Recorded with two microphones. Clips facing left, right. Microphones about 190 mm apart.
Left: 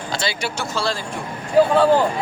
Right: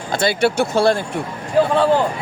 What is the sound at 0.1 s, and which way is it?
Speech, 55° right (ahead or behind).